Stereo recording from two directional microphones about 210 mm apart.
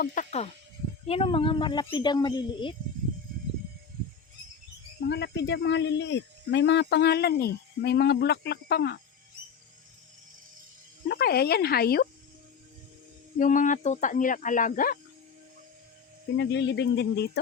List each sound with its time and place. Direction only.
0.0 s speech: 40° left (ahead or behind); by 2.7 s 20° left (ahead or behind)
5.0 s speech: 55° left (ahead or behind)
11.1 s speech: 50° left (ahead or behind)
13.4 s speech: 35° left (ahead or behind)
16.4 s speech: 55° left (ahead or behind)